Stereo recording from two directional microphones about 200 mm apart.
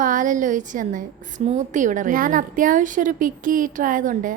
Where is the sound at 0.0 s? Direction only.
40° right (ahead or behind).